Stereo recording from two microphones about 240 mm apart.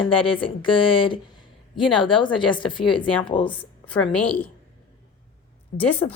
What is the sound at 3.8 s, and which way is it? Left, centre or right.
Speech, centre.